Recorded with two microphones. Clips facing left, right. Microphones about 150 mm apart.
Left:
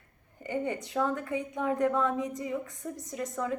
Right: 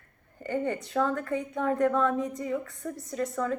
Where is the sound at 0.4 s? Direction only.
15° left (ahead or behind).